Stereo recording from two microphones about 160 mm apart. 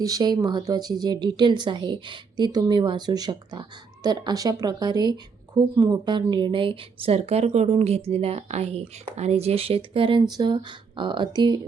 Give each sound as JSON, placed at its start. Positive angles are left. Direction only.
{"t": 0.0, "sound": "speech", "side_deg": -25}